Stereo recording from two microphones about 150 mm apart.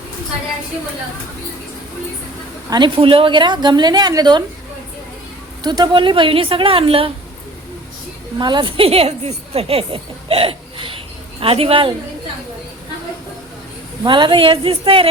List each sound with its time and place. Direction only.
2.6 s a woman's voice: 30° right (ahead or behind)
5.6 s a woman's voice: 30° right (ahead or behind)
8.4 s a woman's voice: 30° right (ahead or behind)
14.0 s a woman's voice: 30° right (ahead or behind)